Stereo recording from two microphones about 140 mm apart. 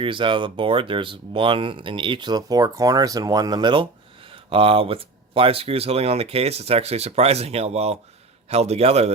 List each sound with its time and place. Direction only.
0.0 s speech: 35° right (ahead or behind)